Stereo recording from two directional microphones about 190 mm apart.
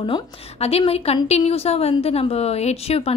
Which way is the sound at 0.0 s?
30° left (ahead or behind).